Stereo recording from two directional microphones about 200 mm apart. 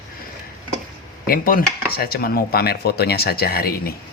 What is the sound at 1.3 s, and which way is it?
Speech, 45° left (ahead or behind).